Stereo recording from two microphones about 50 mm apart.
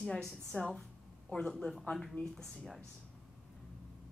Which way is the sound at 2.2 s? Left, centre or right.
Left.